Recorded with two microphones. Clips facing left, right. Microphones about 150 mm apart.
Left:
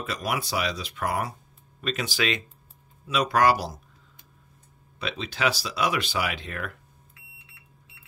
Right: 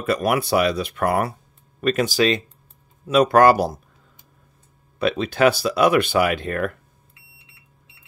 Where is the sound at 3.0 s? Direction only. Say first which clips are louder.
Right 8 dB; 50° right (ahead or behind).